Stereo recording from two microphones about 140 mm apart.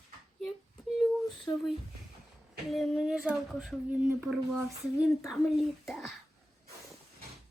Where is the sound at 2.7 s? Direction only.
Centre (ahead or behind).